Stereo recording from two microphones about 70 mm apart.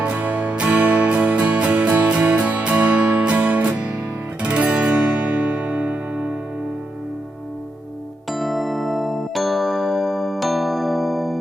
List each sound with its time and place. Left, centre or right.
0.0 s music: right
8.3 s music: centre